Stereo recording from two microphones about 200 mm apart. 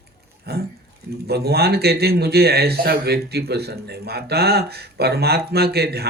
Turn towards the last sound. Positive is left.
turn(degrees=-55)  # may be behind; listen again after turning